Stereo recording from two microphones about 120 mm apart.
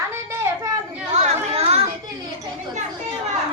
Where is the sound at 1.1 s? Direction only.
65° right (ahead or behind).